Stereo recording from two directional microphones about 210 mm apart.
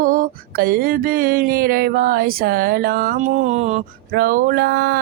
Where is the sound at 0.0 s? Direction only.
40° right (ahead or behind).